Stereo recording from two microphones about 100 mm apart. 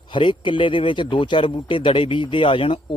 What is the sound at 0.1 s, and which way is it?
A man's voice, 55° left (ahead or behind).